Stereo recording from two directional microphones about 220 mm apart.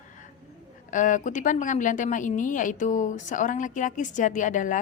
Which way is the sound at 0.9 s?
35° left (ahead or behind).